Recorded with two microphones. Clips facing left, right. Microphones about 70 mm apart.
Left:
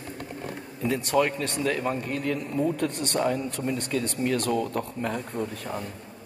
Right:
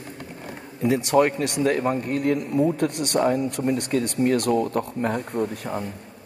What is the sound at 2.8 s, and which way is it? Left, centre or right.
Speech, right.